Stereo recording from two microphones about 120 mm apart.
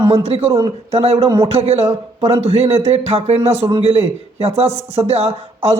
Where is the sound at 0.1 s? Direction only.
55° right (ahead or behind).